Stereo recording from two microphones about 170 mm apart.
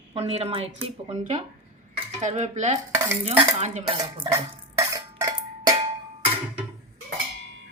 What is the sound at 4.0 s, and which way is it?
Dishes, 25° right (ahead or behind).